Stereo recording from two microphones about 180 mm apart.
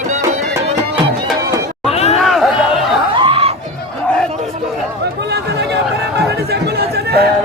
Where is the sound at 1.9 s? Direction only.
35° left (ahead or behind).